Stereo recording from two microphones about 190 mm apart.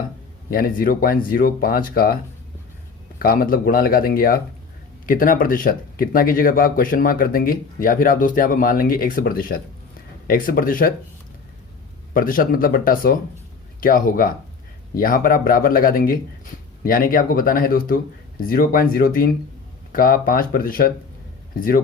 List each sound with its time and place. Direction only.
0.5 s speech: 50° left (ahead or behind)
3.2 s speech: 50° left (ahead or behind)
12.1 s speech: 50° left (ahead or behind)